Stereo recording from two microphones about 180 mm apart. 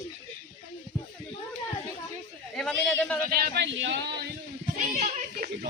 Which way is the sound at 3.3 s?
60° right (ahead or behind).